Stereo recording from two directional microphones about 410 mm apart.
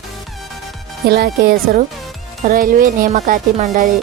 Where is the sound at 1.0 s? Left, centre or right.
Right.